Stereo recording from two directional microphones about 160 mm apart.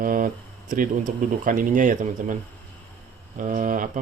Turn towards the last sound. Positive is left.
turn(degrees=-55)  # may be behind; listen again after turning